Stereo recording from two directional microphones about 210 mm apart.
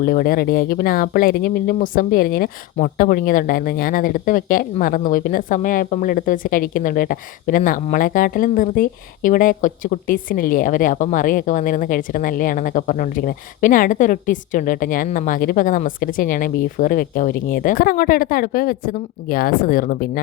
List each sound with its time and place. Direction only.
0.0 s speech: 45° left (ahead or behind)